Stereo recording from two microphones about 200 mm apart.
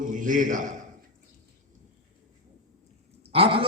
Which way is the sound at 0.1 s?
40° right (ahead or behind).